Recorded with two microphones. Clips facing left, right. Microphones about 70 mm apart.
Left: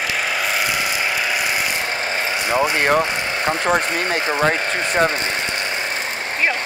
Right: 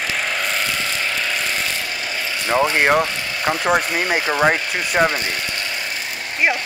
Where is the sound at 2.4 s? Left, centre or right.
Centre.